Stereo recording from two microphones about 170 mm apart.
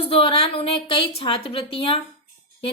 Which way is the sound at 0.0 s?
35° left (ahead or behind).